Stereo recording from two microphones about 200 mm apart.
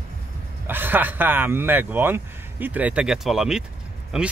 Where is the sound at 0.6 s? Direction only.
10° right (ahead or behind).